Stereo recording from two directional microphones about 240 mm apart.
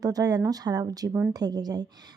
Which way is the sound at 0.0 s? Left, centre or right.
Centre.